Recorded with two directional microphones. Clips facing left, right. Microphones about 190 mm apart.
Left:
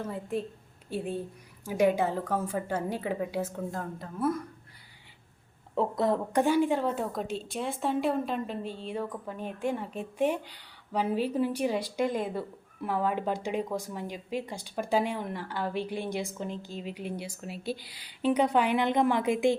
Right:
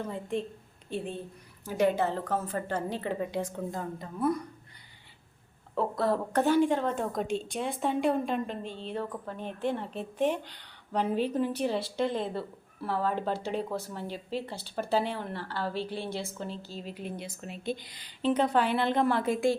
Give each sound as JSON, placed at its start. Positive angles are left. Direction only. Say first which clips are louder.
{"t": 0.0, "sound": "a woman's voice", "louder": "even", "side_deg": 5}
{"t": 5.7, "sound": "a woman's voice", "louder": "left 1 dB", "side_deg": 20}